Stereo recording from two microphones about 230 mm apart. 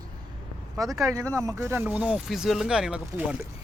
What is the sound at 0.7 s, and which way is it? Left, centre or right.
Speech, centre.